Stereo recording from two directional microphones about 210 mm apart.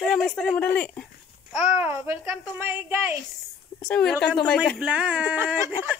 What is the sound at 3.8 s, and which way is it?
Speech, 5° left (ahead or behind).